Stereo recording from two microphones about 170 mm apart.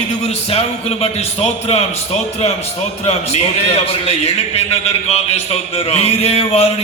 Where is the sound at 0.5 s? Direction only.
35° left (ahead or behind).